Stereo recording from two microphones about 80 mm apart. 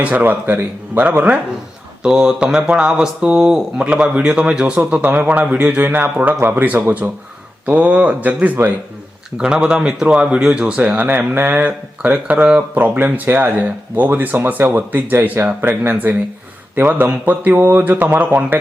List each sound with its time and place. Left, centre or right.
0.0 s speech: centre
2.0 s speech: centre